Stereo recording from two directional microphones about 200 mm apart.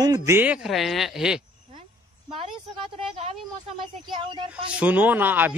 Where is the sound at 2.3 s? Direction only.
30° right (ahead or behind).